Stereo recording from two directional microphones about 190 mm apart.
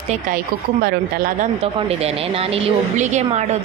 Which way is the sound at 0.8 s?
50° right (ahead or behind).